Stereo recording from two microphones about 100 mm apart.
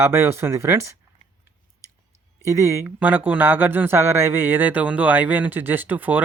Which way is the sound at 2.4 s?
30° right (ahead or behind).